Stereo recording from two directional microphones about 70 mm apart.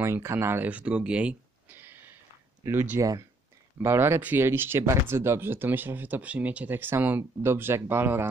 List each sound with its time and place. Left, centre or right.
0.0 s speech: right
0.7 s speech: centre
2.6 s speech: right